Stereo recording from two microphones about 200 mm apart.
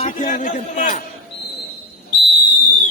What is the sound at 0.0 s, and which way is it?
A man's voice, 40° left (ahead or behind).